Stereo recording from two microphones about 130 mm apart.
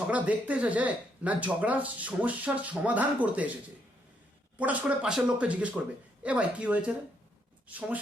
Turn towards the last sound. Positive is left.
turn(degrees=-10)  # may be behind; listen again after turning